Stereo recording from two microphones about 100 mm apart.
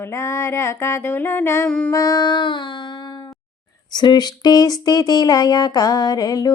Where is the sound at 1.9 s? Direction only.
35° left (ahead or behind); by 2.9 s 50° left (ahead or behind).